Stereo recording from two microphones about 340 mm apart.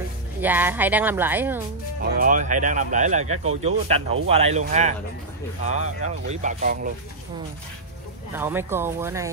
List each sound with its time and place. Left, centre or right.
0.4 s a woman's voice: centre
2.1 s speech: right
8.4 s speech: centre